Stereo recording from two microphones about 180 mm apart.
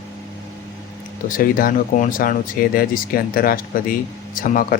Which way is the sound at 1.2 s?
50° left (ahead or behind).